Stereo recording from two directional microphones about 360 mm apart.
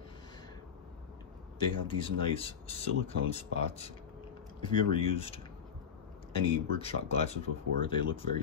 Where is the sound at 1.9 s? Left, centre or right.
Centre.